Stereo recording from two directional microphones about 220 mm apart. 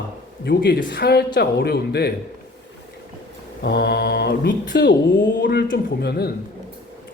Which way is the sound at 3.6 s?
50° left (ahead or behind).